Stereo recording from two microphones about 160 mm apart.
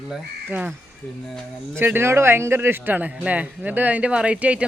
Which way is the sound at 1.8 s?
15° right (ahead or behind).